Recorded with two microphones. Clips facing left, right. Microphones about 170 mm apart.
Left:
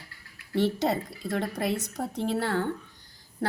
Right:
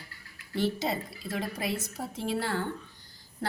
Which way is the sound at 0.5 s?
70° left (ahead or behind).